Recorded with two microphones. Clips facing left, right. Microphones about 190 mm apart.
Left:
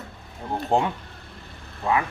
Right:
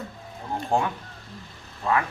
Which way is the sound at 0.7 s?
20° left (ahead or behind).